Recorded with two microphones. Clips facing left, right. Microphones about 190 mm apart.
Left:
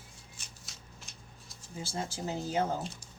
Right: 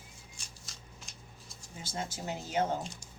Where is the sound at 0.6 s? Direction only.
Centre (ahead or behind).